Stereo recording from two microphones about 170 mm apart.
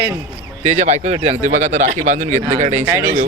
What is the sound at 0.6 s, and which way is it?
A man's voice, 45° right (ahead or behind).